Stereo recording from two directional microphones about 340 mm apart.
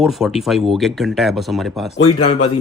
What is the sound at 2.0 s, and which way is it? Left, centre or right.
Speech, centre.